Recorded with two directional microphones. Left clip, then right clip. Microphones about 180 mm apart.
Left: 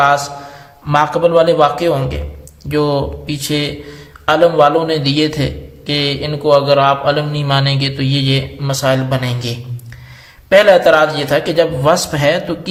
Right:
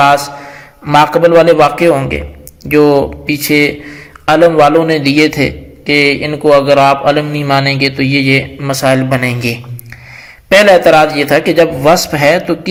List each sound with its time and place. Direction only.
0.0 s mantra: 35° right (ahead or behind)
0.9 s a man's voice: 30° right (ahead or behind)
7.8 s a sound: 35° left (ahead or behind)
8.2 s a man's voice: 20° right (ahead or behind)